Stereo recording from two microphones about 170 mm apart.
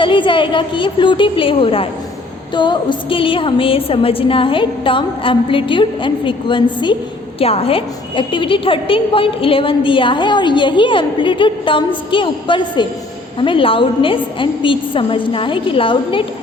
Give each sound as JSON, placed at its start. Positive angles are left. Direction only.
{"t": 0.0, "sound": "a woman's voice", "side_deg": 30}